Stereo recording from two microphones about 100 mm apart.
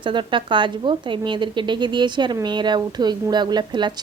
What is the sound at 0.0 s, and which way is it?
A woman's voice, 55° right (ahead or behind).